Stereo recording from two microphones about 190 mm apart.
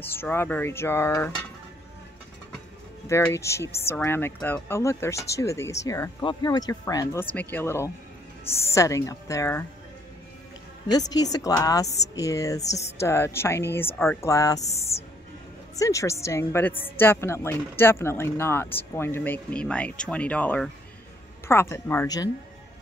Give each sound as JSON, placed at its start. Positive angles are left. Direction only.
{"t": 0.0, "sound": "a woman's voice", "side_deg": 10}
{"t": 3.1, "sound": "a woman's voice", "side_deg": 15}
{"t": 10.9, "sound": "a woman's voice", "side_deg": 20}
{"t": 14.6, "sound": "speech", "side_deg": 35}
{"t": 15.7, "sound": "a woman's voice", "side_deg": 15}